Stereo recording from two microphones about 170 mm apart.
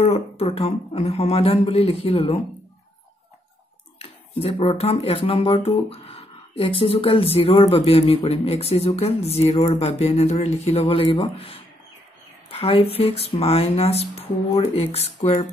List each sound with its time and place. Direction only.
0.0 s speech: 35° left (ahead or behind)
4.0 s speech: 35° left (ahead or behind)